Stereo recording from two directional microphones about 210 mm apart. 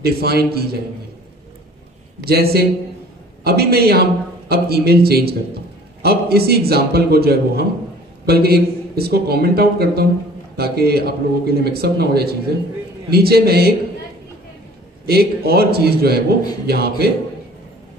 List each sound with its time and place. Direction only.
0.0 s a man's voice: 50° right (ahead or behind)
2.2 s a man's voice: 45° right (ahead or behind)
15.0 s a man's voice: 50° right (ahead or behind)